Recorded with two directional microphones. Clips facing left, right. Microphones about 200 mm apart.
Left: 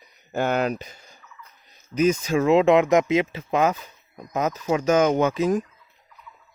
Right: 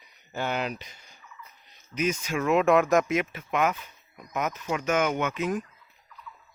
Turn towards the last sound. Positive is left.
turn(degrees=35)  # may be behind; listen again after turning